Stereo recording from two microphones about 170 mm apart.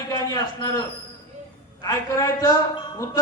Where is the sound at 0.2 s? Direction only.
20° left (ahead or behind).